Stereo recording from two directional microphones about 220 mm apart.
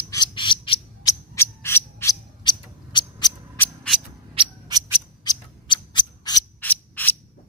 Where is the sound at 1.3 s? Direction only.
10° left (ahead or behind).